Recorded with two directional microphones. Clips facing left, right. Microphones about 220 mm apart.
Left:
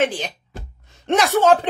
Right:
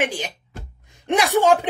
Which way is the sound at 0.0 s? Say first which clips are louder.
Left 3 dB; 15° right (ahead or behind).